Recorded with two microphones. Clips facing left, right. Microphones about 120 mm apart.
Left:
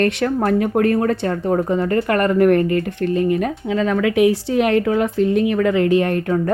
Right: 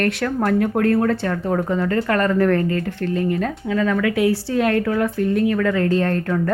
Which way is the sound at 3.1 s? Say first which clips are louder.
Left 4 dB; 75° left (ahead or behind).